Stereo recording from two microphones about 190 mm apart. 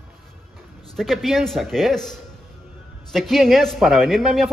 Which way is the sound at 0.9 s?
Centre (ahead or behind).